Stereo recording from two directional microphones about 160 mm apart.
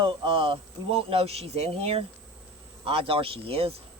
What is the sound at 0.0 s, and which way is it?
Speech, 35° right (ahead or behind).